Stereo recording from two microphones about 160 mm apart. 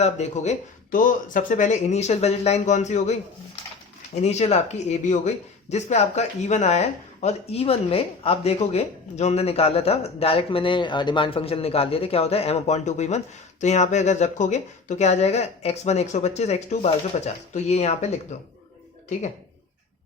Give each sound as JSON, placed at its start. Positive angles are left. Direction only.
{"t": 0.0, "sound": "speech", "side_deg": 45}